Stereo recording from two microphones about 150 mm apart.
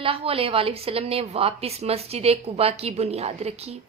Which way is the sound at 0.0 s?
40° right (ahead or behind).